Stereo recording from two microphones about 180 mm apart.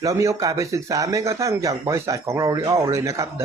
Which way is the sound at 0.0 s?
15° right (ahead or behind).